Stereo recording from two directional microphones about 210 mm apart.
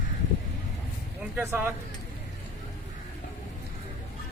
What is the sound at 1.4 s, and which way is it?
Speech, 10° right (ahead or behind).